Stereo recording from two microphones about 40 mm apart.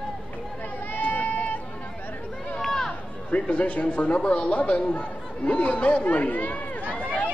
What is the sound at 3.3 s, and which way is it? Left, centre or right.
Speech, left.